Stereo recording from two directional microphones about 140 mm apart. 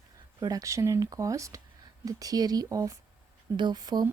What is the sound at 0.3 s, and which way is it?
Speech, 25° right (ahead or behind).